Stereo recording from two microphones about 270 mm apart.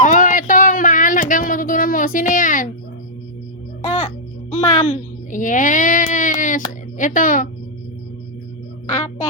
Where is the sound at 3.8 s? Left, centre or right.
Left.